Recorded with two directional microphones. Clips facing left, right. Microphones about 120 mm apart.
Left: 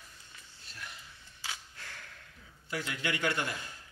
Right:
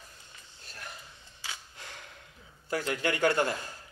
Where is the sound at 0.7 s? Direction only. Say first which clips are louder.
Right 3 dB; 45° right (ahead or behind).